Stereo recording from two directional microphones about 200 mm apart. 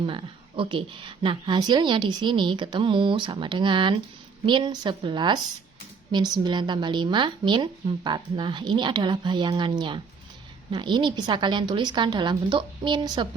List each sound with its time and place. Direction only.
0.0 s a woman's voice: 25° right (ahead or behind)